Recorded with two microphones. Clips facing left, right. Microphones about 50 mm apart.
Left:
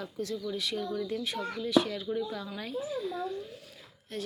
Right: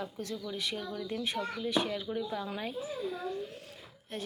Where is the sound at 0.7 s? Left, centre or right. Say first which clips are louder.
Left 4 dB; centre.